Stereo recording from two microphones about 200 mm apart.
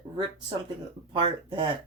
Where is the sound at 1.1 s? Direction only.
25° right (ahead or behind).